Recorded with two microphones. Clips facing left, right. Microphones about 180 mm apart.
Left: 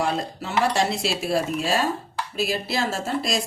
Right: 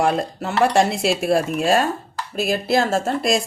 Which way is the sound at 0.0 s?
55° right (ahead or behind).